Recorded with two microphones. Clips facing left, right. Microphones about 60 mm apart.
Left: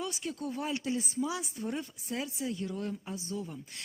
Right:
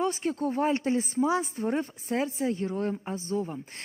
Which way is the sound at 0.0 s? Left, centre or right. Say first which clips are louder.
Right 9 dB; right.